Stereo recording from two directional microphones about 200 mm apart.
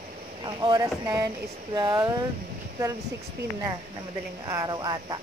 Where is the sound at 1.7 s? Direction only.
20° right (ahead or behind).